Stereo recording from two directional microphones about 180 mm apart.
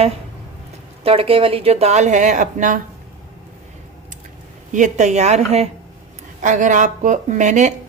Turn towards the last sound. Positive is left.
turn(degrees=-40)  # may be behind; listen again after turning